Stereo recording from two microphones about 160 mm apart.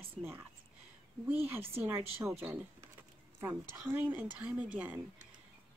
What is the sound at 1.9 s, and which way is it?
Speech, 15° right (ahead or behind).